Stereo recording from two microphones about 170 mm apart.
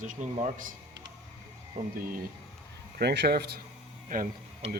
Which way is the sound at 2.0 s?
55° right (ahead or behind).